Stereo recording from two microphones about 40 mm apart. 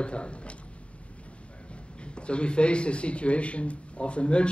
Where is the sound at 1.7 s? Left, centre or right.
Left.